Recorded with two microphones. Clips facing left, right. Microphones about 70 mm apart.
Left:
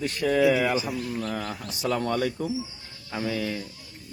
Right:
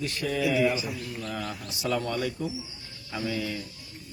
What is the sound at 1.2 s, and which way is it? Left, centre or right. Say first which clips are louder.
Speech: left 3 dB; left.